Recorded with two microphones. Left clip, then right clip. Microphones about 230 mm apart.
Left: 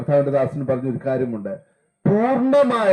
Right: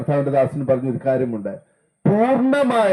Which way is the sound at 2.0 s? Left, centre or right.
Right.